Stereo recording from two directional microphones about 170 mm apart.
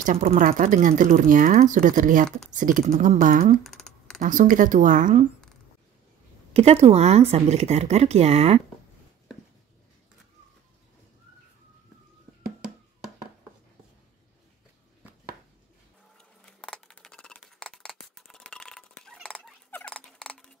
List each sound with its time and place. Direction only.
0.0 s speech: 50° right (ahead or behind)
3.6 s typing: 5° left (ahead or behind)
4.2 s speech: 50° right (ahead or behind)
6.5 s speech: 35° right (ahead or behind)
16.2 s scissors: 5° left (ahead or behind)